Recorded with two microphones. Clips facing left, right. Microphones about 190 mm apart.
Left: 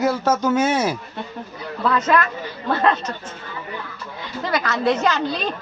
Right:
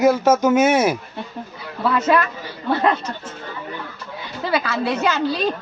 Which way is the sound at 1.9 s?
10° right (ahead or behind).